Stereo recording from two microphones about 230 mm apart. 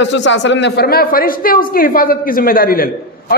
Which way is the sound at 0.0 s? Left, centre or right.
Left.